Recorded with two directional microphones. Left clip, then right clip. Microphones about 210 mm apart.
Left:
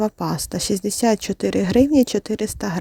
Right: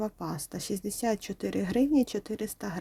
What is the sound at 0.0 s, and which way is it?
Speech, 35° left (ahead or behind).